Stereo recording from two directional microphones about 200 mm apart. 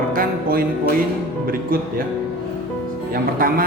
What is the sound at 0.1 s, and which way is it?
Music, 45° right (ahead or behind).